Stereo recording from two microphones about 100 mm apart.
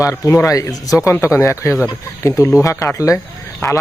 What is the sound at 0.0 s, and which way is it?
Speech, 30° left (ahead or behind).